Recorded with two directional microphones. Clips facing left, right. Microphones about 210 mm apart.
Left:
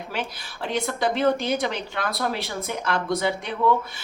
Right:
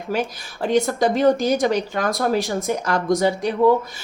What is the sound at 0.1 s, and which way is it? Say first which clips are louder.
A woman's voice: right 10 dB; 45° right (ahead or behind).